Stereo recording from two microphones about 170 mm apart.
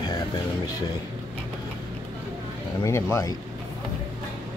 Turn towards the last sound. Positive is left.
turn(degrees=15)  # may be behind; listen again after turning